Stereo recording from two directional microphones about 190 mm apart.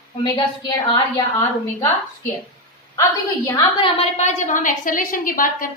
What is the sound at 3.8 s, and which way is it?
A woman's voice, 35° left (ahead or behind).